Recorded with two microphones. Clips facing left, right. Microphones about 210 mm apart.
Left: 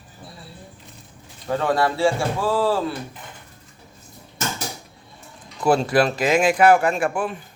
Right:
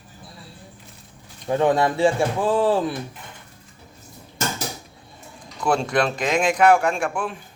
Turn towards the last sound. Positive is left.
turn(degrees=5)  # may be behind; listen again after turning